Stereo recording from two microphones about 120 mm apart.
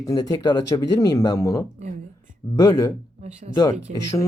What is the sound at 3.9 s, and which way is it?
Speech, 90° right.